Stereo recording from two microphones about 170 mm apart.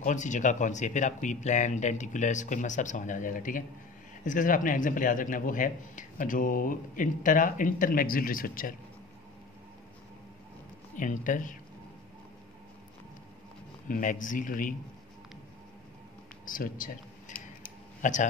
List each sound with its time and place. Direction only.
0.0 s a man's voice: 45° left (ahead or behind)
11.0 s a man's voice: 50° left (ahead or behind)
13.8 s a man's voice: 50° left (ahead or behind)
16.4 s a man's voice: 55° left (ahead or behind)